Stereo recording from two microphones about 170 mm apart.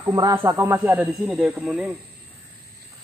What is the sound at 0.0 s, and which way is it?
A man's voice, 20° right (ahead or behind).